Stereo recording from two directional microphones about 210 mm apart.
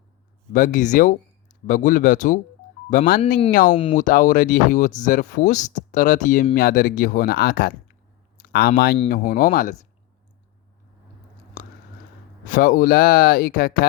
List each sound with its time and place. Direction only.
0.5 s speech: 40° left (ahead or behind)
3.8 s speech: 25° left (ahead or behind)
4.0 s speech: 40° left (ahead or behind)
11.6 s chewing: 40° left (ahead or behind)
12.5 s speech: 40° left (ahead or behind)